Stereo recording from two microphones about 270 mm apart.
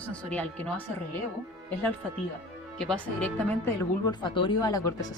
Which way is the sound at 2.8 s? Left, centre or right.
Centre.